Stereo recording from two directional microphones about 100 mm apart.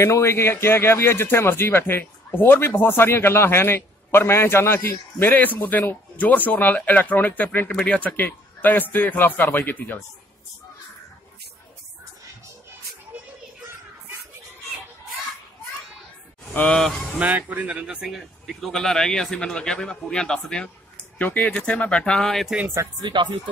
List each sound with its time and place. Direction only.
0.0 s speech: 25° left (ahead or behind)
16.5 s speech: 10° left (ahead or behind)
17.2 s a man's voice: 15° right (ahead or behind); by 22.6 s centre (ahead or behind)
23.0 s speech: 50° right (ahead or behind)